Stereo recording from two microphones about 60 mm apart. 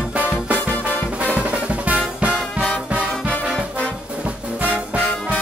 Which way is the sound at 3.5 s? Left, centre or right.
Centre.